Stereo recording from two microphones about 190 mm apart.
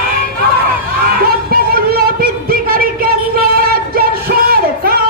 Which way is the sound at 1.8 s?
50° right (ahead or behind).